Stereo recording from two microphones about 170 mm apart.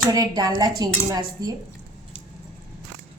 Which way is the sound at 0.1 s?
20° right (ahead or behind).